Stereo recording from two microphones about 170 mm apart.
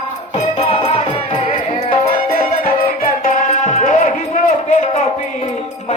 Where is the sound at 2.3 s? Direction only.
55° left (ahead or behind).